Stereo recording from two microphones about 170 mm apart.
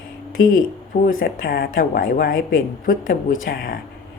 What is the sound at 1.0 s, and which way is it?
A woman's voice, 55° left (ahead or behind).